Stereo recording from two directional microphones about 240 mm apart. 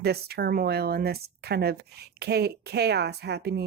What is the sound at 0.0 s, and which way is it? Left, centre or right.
Speech, right.